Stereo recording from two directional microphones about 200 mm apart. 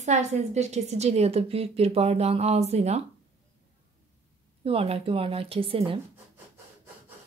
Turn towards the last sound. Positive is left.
turn(degrees=-25)  # may be behind; listen again after turning